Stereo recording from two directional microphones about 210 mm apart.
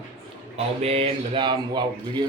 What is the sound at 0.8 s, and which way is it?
Speech, 30° right (ahead or behind).